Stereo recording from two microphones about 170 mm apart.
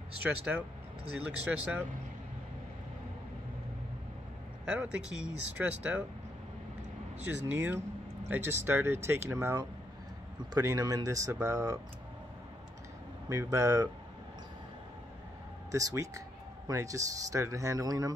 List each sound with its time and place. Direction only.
0.5 s speech: 10° right (ahead or behind)
4.6 s speech: 5° right (ahead or behind)
7.2 s speech: 10° right (ahead or behind)
13.3 s speech: 20° right (ahead or behind)
15.7 s speech: 20° right (ahead or behind)